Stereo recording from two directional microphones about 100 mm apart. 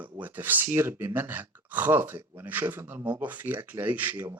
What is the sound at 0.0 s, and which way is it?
Speech, 15° right (ahead or behind).